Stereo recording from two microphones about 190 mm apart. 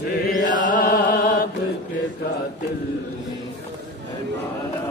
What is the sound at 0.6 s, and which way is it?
Music, 45° left (ahead or behind).